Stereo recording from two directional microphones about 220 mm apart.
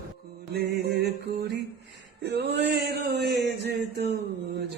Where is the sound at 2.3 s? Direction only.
50° right (ahead or behind).